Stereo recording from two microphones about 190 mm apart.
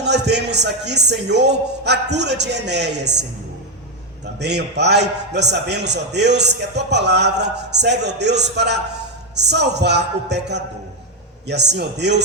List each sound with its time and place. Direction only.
0.0 s a man's voice: 65° right (ahead or behind)
4.4 s a man's voice: 60° right (ahead or behind)